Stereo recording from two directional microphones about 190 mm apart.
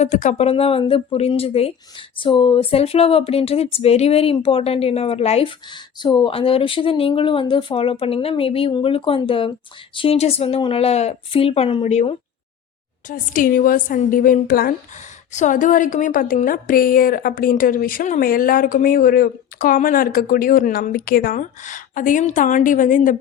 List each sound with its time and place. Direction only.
0.0 s a woman's voice: 40° left (ahead or behind)
13.1 s a woman's voice: 45° left (ahead or behind)
15.3 s a woman's voice: 40° left (ahead or behind)